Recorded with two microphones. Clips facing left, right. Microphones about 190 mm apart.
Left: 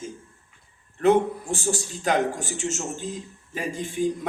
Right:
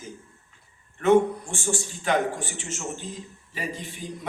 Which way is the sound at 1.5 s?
40° left (ahead or behind).